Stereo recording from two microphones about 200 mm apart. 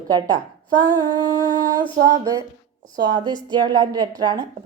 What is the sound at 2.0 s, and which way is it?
A woman's voice, 15° right (ahead or behind).